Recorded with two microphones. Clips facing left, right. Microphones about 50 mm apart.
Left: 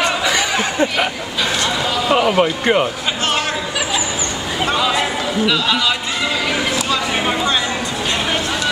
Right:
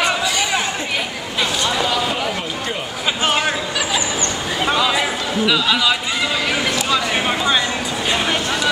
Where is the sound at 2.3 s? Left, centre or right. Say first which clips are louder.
Left 10 dB; left.